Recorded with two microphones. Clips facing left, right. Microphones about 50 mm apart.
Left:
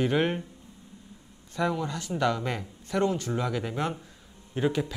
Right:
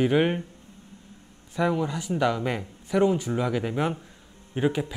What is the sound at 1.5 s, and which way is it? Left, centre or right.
Speech, centre.